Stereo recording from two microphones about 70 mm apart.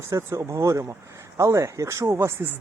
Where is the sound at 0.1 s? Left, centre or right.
Right.